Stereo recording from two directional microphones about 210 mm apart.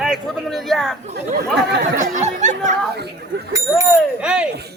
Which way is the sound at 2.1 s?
35° right (ahead or behind).